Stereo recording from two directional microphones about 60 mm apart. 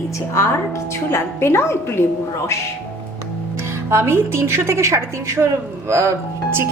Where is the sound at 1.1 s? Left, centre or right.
Left.